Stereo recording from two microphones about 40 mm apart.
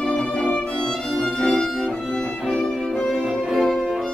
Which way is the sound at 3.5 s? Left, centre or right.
Centre.